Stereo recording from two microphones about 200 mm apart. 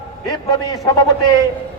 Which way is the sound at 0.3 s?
20° left (ahead or behind).